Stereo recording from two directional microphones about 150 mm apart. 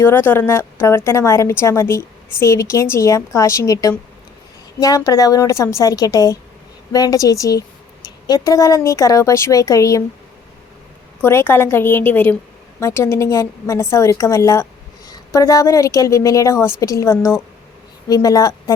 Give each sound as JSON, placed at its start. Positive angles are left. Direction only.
{"t": 0.0, "sound": "a woman's voice", "side_deg": 15}
{"t": 11.2, "sound": "a woman's voice", "side_deg": 15}